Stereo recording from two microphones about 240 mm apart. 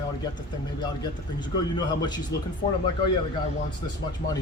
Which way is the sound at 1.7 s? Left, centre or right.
Centre.